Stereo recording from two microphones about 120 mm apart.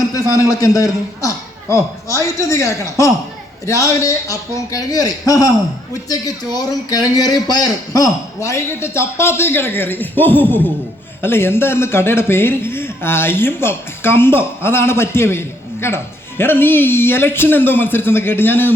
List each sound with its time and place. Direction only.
0.1 s a man's voice: 30° left (ahead or behind)